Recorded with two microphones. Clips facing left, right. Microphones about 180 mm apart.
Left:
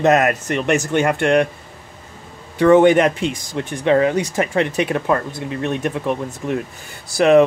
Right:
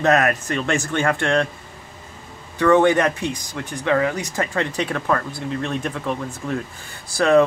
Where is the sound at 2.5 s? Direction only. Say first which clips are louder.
Left 4 dB; 25° left (ahead or behind).